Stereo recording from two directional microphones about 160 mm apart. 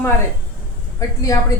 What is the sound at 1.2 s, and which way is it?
Speech, 20° left (ahead or behind).